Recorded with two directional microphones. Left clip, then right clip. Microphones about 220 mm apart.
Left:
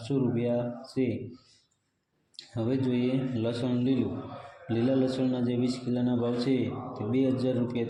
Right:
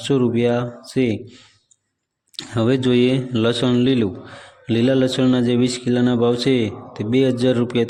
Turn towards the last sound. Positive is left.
turn(degrees=-40)  # may be behind; listen again after turning